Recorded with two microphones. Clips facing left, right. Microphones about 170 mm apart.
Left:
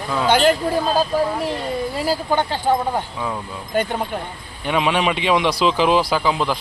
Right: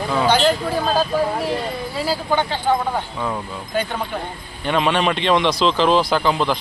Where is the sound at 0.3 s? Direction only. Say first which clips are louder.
Left 2 dB; 50° left (ahead or behind).